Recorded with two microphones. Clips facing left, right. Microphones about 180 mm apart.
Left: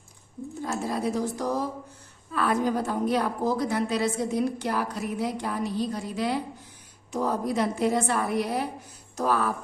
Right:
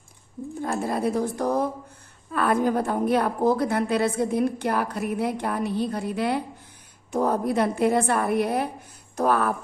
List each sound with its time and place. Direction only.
0.6 s a woman's voice: 55° right (ahead or behind)